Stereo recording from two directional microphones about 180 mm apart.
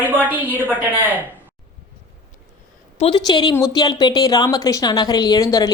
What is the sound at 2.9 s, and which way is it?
A woman's voice, 30° left (ahead or behind).